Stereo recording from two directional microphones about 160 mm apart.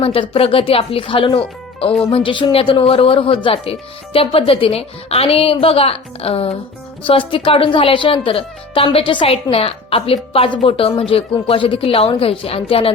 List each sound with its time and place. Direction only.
0.0 s speech: 35° left (ahead or behind)